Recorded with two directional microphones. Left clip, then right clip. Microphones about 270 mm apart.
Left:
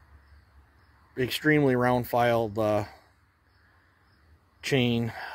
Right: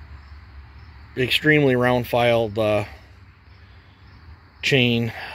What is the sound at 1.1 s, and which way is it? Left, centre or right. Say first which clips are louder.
Speech: right 7 dB; centre.